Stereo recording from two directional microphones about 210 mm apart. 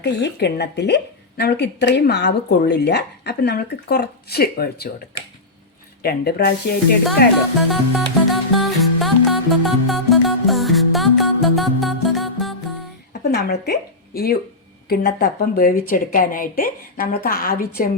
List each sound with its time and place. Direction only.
0.0 s a woman's voice: 50° left (ahead or behind)
6.0 s a woman's voice: 45° left (ahead or behind)
7.7 s music: centre (ahead or behind)
13.2 s a woman's voice: 50° left (ahead or behind)